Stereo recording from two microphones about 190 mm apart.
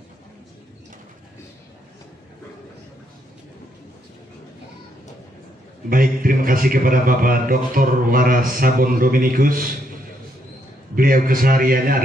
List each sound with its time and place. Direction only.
5.9 s a man's voice: 45° right (ahead or behind)
11.0 s a man's voice: 50° right (ahead or behind)